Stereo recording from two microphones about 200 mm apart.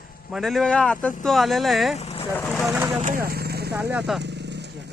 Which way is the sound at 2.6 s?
15° right (ahead or behind).